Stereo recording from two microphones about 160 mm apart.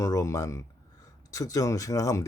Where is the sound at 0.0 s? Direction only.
20° left (ahead or behind).